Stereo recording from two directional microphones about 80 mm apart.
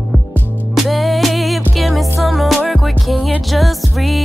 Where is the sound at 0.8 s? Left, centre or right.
Centre.